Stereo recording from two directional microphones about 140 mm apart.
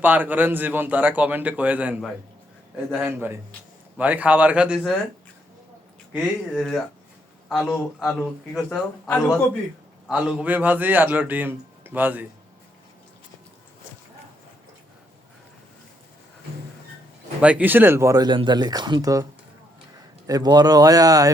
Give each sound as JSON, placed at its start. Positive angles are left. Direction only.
{"t": 0.0, "sound": "a man's voice", "side_deg": -10}
{"t": 3.1, "sound": "a man's voice", "side_deg": -15}
{"t": 6.1, "sound": "speech", "side_deg": 0}
{"t": 10.1, "sound": "a man's voice", "side_deg": -5}
{"t": 17.4, "sound": "speech", "side_deg": -10}